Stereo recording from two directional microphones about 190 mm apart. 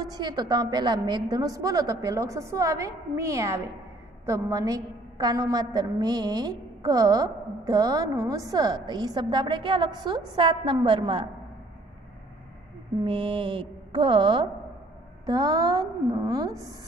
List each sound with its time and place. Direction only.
0.0 s a woman's voice: 20° right (ahead or behind)
13.0 s a woman's voice: 25° right (ahead or behind)